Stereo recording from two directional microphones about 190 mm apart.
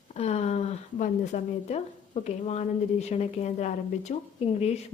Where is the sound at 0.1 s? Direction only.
35° left (ahead or behind).